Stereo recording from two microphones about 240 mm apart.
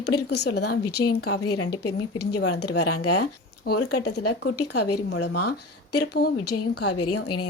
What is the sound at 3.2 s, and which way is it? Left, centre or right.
Speech, left.